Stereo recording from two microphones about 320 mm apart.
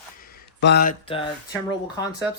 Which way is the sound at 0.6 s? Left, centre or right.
Left.